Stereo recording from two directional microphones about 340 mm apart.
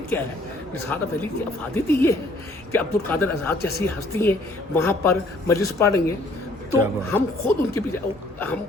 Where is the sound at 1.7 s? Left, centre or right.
Centre.